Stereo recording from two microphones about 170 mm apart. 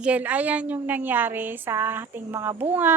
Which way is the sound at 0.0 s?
10° right (ahead or behind).